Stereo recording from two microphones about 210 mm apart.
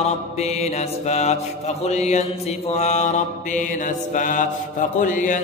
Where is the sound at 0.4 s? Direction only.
30° left (ahead or behind).